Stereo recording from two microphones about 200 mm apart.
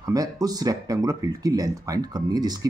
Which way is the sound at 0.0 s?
20° right (ahead or behind).